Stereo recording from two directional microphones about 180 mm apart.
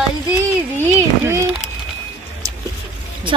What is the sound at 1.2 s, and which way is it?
Speech, 15° right (ahead or behind).